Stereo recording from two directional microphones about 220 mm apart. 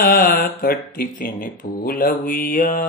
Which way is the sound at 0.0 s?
40° left (ahead or behind).